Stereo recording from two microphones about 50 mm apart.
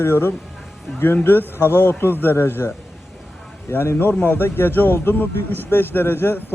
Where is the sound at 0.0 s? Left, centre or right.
Left.